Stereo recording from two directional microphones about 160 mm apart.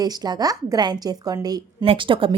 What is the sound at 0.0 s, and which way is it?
Speech, 25° right (ahead or behind).